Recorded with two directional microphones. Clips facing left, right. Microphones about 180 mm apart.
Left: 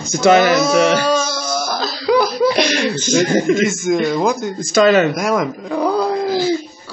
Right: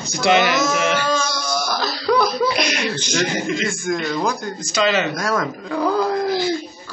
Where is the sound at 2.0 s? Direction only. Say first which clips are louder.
Left 3 dB; 5° left (ahead or behind).